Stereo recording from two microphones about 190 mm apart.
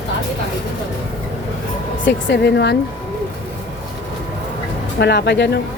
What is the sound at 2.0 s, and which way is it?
Speech, 60° left (ahead or behind).